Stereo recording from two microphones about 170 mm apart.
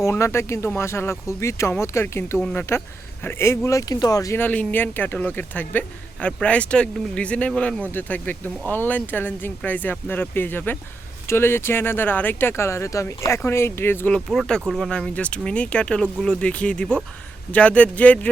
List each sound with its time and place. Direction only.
0.0 s speech: 15° left (ahead or behind)